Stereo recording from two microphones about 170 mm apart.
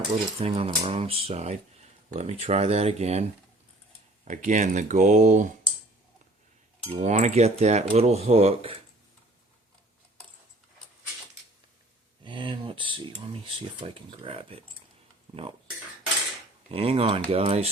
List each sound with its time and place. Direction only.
0.3 s speech: 35° right (ahead or behind)
4.3 s speech: 50° right (ahead or behind)
7.0 s speech: 45° right (ahead or behind)
12.2 s speech: 30° right (ahead or behind)
16.7 s speech: 35° right (ahead or behind)